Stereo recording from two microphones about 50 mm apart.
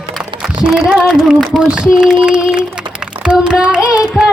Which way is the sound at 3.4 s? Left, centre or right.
Right.